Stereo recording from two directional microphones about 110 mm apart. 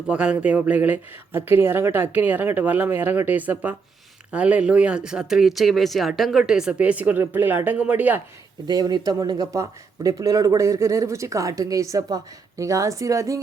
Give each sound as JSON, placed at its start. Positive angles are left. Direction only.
{"t": 0.1, "sound": "speech", "side_deg": -10}
{"t": 8.6, "sound": "speech", "side_deg": -40}